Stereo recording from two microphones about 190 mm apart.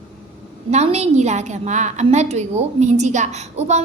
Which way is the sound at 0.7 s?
35° right (ahead or behind).